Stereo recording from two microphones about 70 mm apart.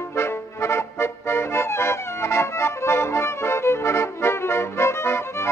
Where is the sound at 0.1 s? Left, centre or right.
Left.